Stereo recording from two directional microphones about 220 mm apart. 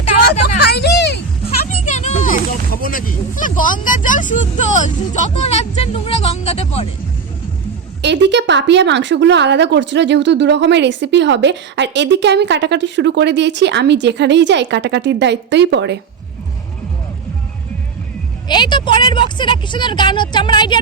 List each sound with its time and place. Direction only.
0.2 s a sound: 40° left (ahead or behind)
1.8 s speech: 35° left (ahead or behind)
8.0 s speech: 50° right (ahead or behind)
18.4 s a woman's voice: 20° left (ahead or behind)